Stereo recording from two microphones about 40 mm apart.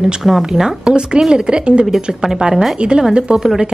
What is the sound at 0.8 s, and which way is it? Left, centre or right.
A woman's voice, right.